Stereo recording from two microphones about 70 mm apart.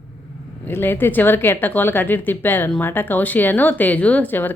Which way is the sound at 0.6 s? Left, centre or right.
Left.